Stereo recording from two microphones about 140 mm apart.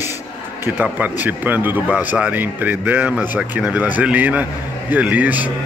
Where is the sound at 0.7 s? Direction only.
10° right (ahead or behind).